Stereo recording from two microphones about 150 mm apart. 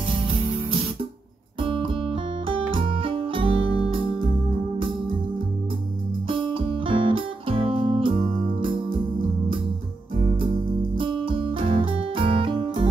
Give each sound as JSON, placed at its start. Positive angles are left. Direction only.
{"t": 1.6, "sound": "music", "side_deg": -35}
{"t": 6.2, "sound": "music", "side_deg": -35}
{"t": 10.1, "sound": "music", "side_deg": -35}